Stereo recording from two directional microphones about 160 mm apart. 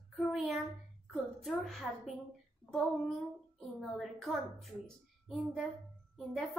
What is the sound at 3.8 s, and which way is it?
Speech, centre (ahead or behind).